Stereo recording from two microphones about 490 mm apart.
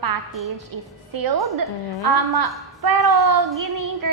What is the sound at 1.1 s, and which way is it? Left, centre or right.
A woman's voice, right.